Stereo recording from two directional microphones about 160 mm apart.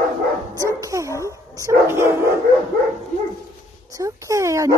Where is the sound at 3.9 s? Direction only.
20° right (ahead or behind).